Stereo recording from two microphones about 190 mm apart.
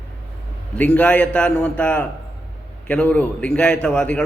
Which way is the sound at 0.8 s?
5° left (ahead or behind).